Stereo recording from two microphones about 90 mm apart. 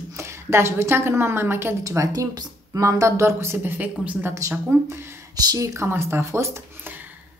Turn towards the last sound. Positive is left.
turn(degrees=-30)  # may be behind; listen again after turning